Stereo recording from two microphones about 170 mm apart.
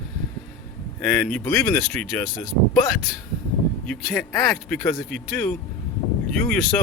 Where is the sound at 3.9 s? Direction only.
5° left (ahead or behind).